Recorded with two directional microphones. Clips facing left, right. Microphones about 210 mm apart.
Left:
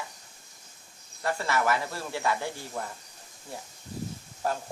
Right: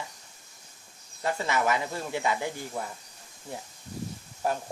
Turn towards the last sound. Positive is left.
turn(degrees=-15)  # may be behind; listen again after turning